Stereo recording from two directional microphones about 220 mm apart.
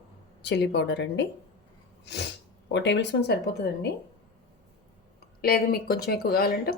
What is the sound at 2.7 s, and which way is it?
Speech, 50° left (ahead or behind).